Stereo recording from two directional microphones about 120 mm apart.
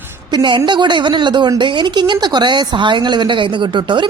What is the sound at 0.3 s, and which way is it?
A woman's voice, 40° right (ahead or behind).